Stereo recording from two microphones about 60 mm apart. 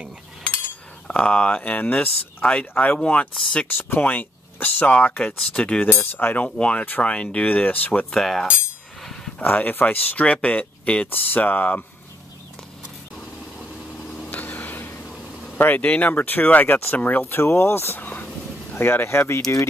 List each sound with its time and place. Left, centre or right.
1.0 s speech: centre
3.6 s speech: left
8.1 s cutlery: centre
9.0 s a sound: centre
9.4 s speech: left
14.2 s a sound: left
15.5 s speech: left
18.0 s a sound: left
18.8 s speech: left